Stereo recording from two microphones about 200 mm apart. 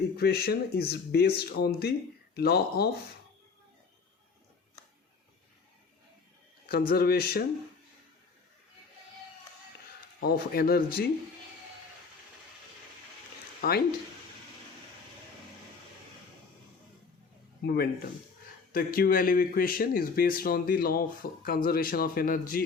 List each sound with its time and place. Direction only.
0.2 s speech: 50° left (ahead or behind)
6.7 s speech: 50° left (ahead or behind)
10.2 s speech: 50° left (ahead or behind)
13.6 s speech: 50° left (ahead or behind)
17.6 s speech: 50° left (ahead or behind)